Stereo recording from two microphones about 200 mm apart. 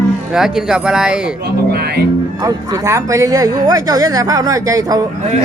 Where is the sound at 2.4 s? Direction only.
20° right (ahead or behind).